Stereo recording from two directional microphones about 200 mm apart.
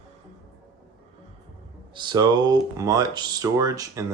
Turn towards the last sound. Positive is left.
turn(degrees=-15)  # may be behind; listen again after turning